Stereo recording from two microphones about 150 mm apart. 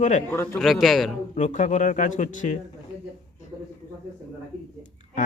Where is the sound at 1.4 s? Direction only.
50° left (ahead or behind).